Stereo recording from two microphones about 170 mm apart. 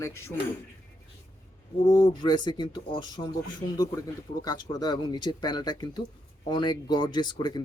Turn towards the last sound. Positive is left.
turn(degrees=25)  # may be behind; listen again after turning